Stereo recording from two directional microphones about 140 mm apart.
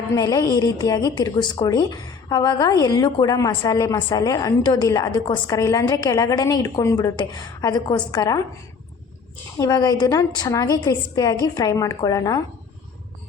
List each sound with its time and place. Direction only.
0.2 s a woman's voice: 25° left (ahead or behind)
9.6 s a woman's voice: 30° left (ahead or behind)